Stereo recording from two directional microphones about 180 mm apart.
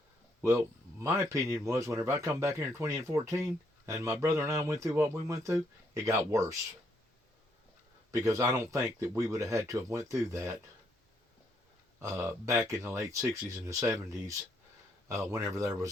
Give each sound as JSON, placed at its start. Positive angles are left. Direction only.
{"t": 1.0, "sound": "speech", "side_deg": -15}
{"t": 8.1, "sound": "speech", "side_deg": -15}
{"t": 11.9, "sound": "speech", "side_deg": -15}